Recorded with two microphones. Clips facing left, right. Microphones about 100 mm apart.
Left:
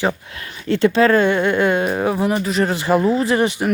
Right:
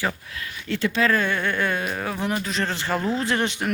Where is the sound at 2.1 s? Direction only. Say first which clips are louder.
Left 7 dB; 5° left (ahead or behind).